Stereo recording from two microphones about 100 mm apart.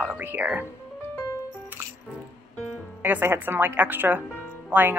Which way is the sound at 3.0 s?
20° right (ahead or behind).